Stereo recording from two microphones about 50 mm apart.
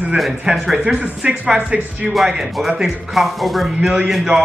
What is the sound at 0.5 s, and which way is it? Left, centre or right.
Speech, right.